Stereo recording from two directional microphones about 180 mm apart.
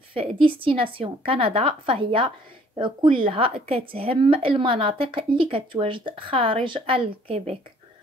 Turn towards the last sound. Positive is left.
turn(degrees=-35)  # may be behind; listen again after turning